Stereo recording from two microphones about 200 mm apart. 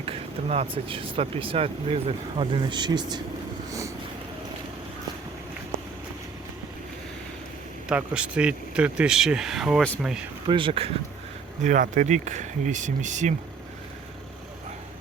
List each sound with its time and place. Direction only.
0.0 s speech: 30° right (ahead or behind)
3.7 s vehicle: 15° right (ahead or behind)
7.9 s speech: 5° right (ahead or behind)
10.4 s speech: 25° right (ahead or behind)
11.6 s speech: 40° right (ahead or behind)